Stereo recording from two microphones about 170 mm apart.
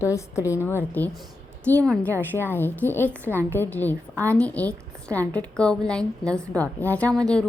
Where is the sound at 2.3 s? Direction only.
10° left (ahead or behind).